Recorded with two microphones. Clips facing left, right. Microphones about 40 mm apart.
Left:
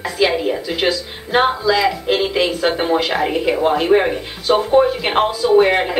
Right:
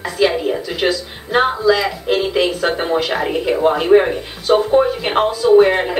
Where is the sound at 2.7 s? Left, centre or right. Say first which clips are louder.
Left 1 dB; centre.